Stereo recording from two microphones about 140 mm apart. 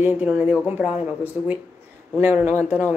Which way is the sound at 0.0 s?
15° right (ahead or behind).